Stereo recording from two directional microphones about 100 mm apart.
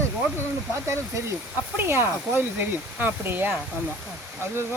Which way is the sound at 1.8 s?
25° right (ahead or behind).